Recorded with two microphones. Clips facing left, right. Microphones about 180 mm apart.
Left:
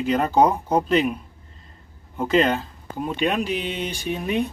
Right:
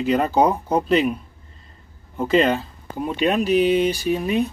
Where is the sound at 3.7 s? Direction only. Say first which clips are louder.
Right 9 dB; 5° right (ahead or behind).